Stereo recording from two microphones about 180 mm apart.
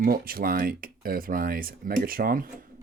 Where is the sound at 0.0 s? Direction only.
55° right (ahead or behind).